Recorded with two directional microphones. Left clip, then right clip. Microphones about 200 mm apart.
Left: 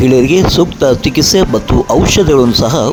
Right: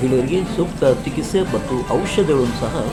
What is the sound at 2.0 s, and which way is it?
Speech, 50° left (ahead or behind).